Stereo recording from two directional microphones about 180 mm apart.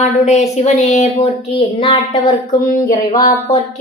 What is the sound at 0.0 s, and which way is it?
A woman's voice, 40° left (ahead or behind).